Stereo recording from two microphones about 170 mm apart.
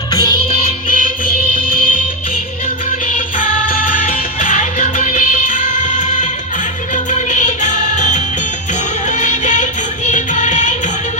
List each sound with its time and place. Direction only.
0.1 s music: 20° left (ahead or behind)
0.9 s music: 50° left (ahead or behind)
3.2 s music: 50° left (ahead or behind)